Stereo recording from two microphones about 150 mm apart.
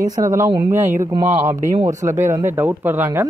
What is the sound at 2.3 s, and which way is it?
Speech, 15° right (ahead or behind).